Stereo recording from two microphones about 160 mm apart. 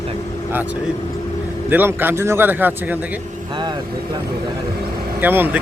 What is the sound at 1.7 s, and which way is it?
A man's voice, 10° right (ahead or behind).